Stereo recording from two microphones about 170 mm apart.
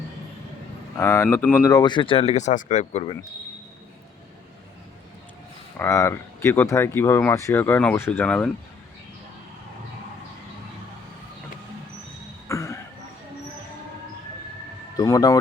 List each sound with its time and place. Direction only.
0.9 s speech: 15° left (ahead or behind)
1.7 s speech: 25° left (ahead or behind)
5.8 s speech: 15° left (ahead or behind)
12.5 s a sound: 15° left (ahead or behind)
14.9 s speech: 20° left (ahead or behind)